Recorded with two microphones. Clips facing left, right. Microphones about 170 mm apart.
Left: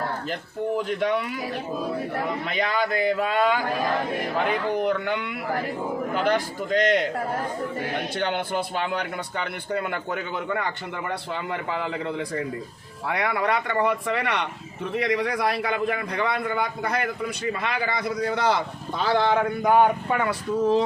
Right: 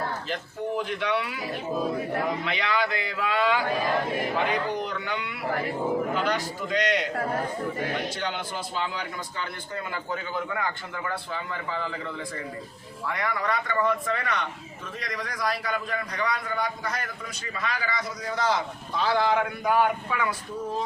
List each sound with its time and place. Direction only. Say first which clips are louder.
0.9 s speech: left 4 dB; 45° left (ahead or behind)
2.4 s speech: left 2 dB; 45° left (ahead or behind)
4.7 s speech: left 6 dB; 55° left (ahead or behind)
8.2 s a man's voice: left 6 dB; 55° left (ahead or behind)
13.1 s a man's voice: left 4 dB; 65° left (ahead or behind)
19.2 s speech: left 3 dB; 30° left (ahead or behind)
20.1 s a man's voice: left 4 dB; 55° left (ahead or behind)
20.6 s speech: left 12 dB; 90° left